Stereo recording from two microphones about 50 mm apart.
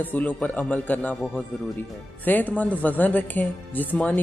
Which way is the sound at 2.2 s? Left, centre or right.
Left.